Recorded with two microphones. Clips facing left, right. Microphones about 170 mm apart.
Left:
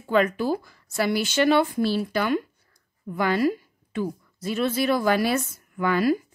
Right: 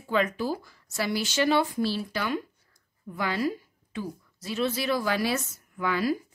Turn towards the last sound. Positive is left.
turn(degrees=55)  # may be behind; listen again after turning